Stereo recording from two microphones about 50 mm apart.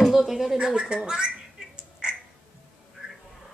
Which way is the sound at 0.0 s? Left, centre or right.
Centre.